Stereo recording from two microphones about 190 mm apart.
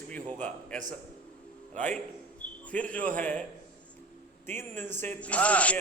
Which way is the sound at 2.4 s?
5° left (ahead or behind).